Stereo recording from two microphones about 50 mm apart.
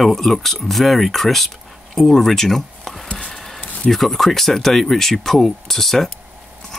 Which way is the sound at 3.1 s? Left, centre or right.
Centre.